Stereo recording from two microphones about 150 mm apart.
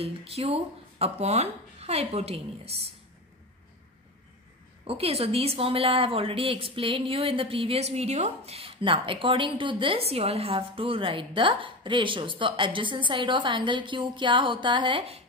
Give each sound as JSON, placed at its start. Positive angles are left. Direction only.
{"t": 0.0, "sound": "speech", "side_deg": -40}
{"t": 4.8, "sound": "speech", "side_deg": -40}